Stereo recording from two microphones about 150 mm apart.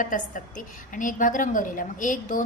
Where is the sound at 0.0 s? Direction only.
60° left (ahead or behind).